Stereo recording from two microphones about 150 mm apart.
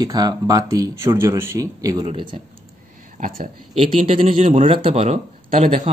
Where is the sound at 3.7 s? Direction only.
40° right (ahead or behind).